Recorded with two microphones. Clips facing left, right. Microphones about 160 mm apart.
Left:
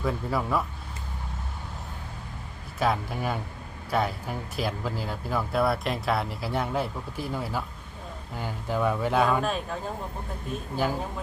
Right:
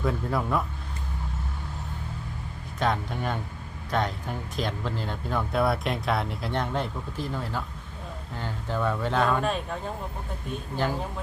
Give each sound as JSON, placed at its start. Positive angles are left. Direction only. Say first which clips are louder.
{"t": 0.0, "sound": "speech", "louder": "right 1 dB", "side_deg": 0}
{"t": 2.7, "sound": "speech", "louder": "left 1 dB", "side_deg": 5}